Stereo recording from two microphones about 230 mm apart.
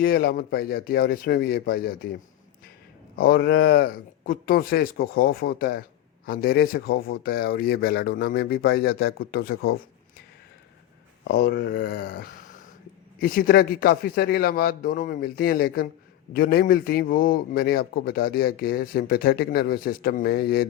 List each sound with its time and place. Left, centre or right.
0.0 s a man's voice: left
3.2 s a man's voice: left
11.3 s a man's voice: left